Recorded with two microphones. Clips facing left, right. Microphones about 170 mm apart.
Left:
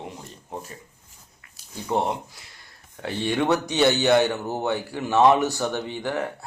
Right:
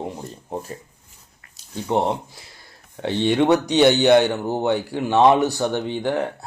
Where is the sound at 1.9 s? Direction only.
25° right (ahead or behind).